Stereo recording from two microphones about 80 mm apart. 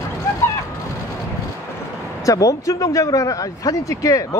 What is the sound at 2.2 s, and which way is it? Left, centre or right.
Speech, left.